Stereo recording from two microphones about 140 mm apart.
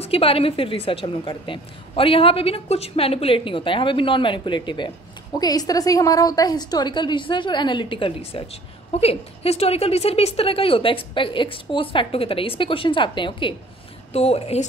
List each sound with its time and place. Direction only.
0.0 s a woman's voice: 45° left (ahead or behind)
14.1 s speech: 45° left (ahead or behind)